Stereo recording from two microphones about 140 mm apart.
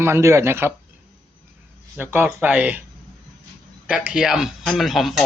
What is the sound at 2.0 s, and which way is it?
Speech, 15° right (ahead or behind).